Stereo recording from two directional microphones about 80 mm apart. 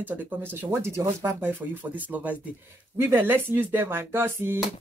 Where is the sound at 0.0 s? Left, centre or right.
Right.